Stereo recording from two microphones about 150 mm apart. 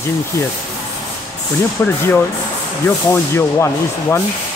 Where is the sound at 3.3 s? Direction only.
15° left (ahead or behind).